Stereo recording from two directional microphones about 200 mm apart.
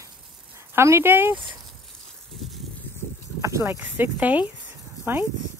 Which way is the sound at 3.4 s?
15° right (ahead or behind).